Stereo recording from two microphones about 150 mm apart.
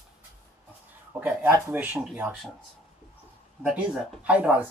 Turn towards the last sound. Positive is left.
turn(degrees=-10)  # may be behind; listen again after turning